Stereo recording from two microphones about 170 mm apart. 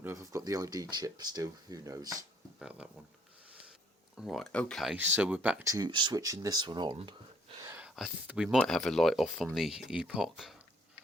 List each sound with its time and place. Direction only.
0.0 s speech: 15° right (ahead or behind)
2.6 s speech: 5° right (ahead or behind)
4.2 s speech: centre (ahead or behind)
5.7 s speech: 25° right (ahead or behind)
7.6 s a sound: 15° right (ahead or behind)
7.9 s speech: 5° right (ahead or behind)